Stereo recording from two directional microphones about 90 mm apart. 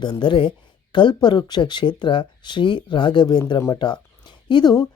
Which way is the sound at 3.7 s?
55° left (ahead or behind).